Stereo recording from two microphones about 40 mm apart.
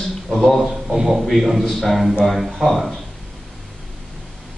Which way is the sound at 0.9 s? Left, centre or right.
Centre.